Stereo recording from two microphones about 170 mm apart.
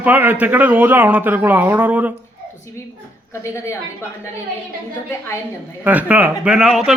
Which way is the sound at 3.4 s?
15° left (ahead or behind).